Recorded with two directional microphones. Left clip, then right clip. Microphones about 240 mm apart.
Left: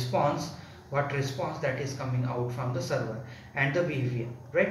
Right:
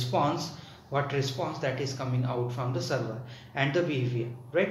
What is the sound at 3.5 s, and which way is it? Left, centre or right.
Speech, centre.